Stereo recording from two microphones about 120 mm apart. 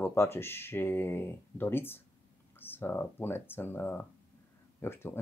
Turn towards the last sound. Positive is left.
turn(degrees=20)  # may be behind; listen again after turning